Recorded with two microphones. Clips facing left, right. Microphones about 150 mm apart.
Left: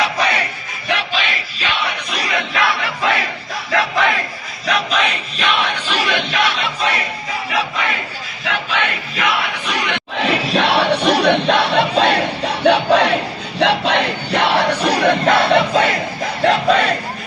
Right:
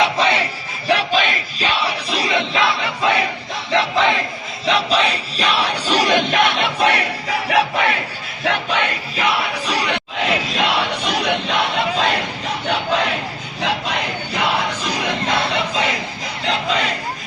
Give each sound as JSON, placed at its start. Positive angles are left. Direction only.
{"t": 0.0, "sound": "battle cry", "side_deg": -25}
{"t": 0.9, "sound": "battle cry", "side_deg": -40}
{"t": 4.6, "sound": "crowd", "side_deg": -30}
{"t": 9.1, "sound": "a sound", "side_deg": -30}
{"t": 10.5, "sound": "crowd", "side_deg": 65}
{"t": 16.2, "sound": "battle cry", "side_deg": 55}